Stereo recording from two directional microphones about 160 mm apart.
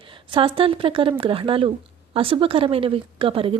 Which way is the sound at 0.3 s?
30° right (ahead or behind).